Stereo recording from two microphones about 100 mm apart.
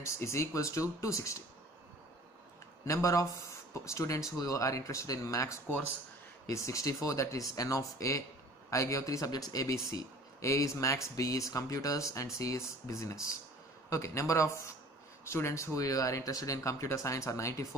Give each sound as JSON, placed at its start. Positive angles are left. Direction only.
{"t": 0.0, "sound": "speech", "side_deg": 30}
{"t": 2.8, "sound": "speech", "side_deg": 30}